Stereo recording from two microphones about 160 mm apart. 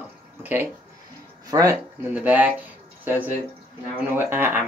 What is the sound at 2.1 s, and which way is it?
Speech, 10° right (ahead or behind).